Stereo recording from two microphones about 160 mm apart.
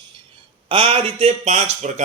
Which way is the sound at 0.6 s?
35° right (ahead or behind).